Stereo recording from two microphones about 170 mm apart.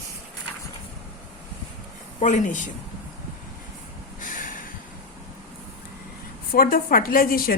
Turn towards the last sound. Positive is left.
turn(degrees=60)  # may be behind; listen again after turning